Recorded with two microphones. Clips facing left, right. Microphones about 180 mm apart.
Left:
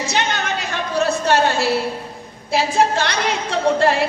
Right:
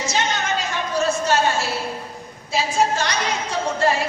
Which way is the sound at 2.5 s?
60° left (ahead or behind).